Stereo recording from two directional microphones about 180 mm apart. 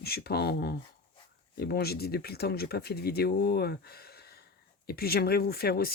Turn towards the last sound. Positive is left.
turn(degrees=60)  # may be behind; listen again after turning